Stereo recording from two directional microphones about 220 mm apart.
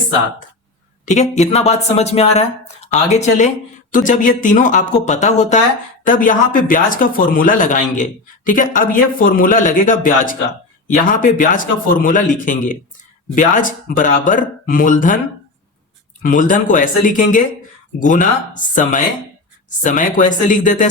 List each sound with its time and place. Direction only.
1.0 s speech: 30° left (ahead or behind)
16.2 s speech: 35° left (ahead or behind)